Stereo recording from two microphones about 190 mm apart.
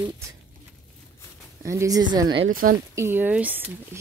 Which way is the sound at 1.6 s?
15° right (ahead or behind).